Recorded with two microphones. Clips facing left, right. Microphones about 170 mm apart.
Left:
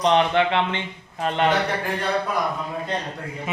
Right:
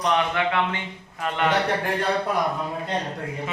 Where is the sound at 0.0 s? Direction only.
25° left (ahead or behind).